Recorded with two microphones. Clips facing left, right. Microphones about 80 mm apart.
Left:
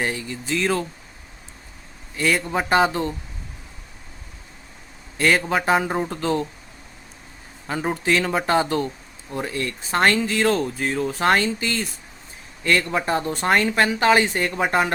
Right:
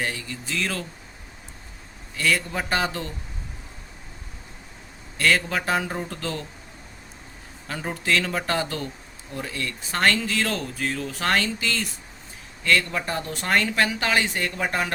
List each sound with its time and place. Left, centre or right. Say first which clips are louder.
0.0 s speech: left 4 dB; left
2.1 s speech: left 3 dB; left
5.1 s speech: left 3 dB; left
7.7 s speech: left 4 dB; left